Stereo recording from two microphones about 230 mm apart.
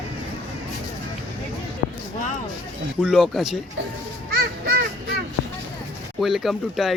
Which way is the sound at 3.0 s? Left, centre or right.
Centre.